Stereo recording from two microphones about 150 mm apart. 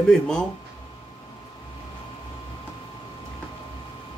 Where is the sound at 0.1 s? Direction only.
5° left (ahead or behind).